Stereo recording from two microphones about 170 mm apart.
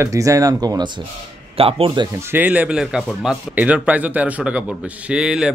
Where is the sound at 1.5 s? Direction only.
35° right (ahead or behind).